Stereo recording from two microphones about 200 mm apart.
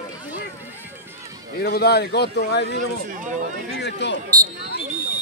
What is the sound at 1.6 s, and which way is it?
A man's voice, 50° left (ahead or behind).